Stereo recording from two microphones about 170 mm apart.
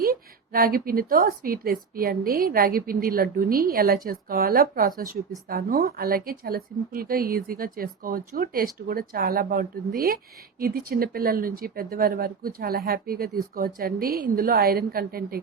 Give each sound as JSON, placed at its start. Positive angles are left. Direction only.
{"t": 0.0, "sound": "a woman's voice", "side_deg": -60}